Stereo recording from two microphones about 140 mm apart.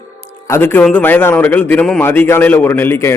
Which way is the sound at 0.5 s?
10° left (ahead or behind).